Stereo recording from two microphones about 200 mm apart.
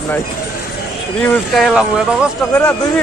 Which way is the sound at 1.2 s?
Centre (ahead or behind).